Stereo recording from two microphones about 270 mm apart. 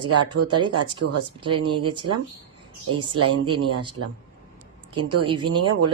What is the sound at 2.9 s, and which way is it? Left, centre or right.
Speech, right.